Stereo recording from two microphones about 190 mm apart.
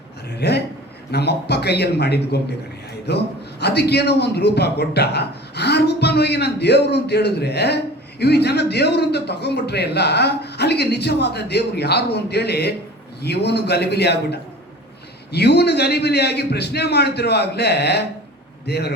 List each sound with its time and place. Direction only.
0.3 s speech: 60° left (ahead or behind)